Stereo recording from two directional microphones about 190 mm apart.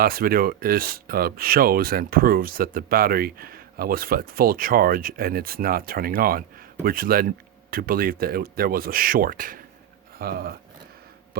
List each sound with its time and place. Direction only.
0.0 s speech: 50° right (ahead or behind)